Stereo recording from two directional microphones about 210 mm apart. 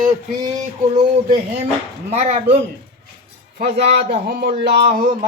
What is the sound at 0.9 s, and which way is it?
A man's voice, 30° right (ahead or behind).